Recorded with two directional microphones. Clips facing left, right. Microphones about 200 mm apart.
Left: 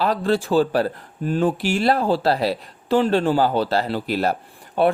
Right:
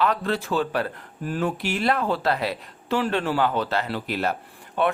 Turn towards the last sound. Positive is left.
turn(degrees=35)  # may be behind; listen again after turning